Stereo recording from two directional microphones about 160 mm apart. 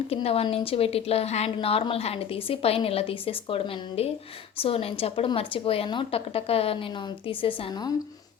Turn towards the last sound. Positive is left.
turn(degrees=30)  # may be behind; listen again after turning